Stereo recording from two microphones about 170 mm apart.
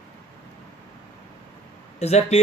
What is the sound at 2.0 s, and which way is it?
Speech, 40° left (ahead or behind).